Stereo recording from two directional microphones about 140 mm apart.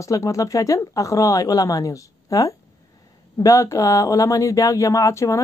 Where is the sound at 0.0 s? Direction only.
20° left (ahead or behind).